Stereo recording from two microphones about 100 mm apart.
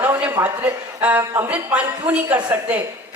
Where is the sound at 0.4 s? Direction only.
15° right (ahead or behind).